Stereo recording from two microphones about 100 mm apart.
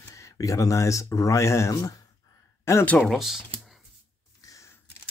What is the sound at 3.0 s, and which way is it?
Speech, centre (ahead or behind).